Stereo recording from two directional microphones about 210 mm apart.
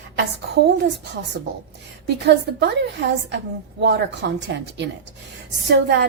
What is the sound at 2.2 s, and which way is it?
A woman's voice, 55° right (ahead or behind).